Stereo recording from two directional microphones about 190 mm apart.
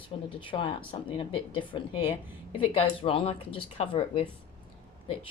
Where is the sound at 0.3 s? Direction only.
25° left (ahead or behind).